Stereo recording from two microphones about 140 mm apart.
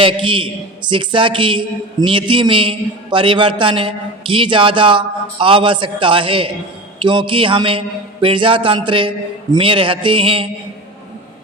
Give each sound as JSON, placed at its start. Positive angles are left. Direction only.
{"t": 0.0, "sound": "a man's voice", "side_deg": -40}